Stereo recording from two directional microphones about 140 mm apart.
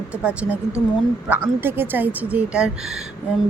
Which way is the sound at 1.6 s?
15° right (ahead or behind).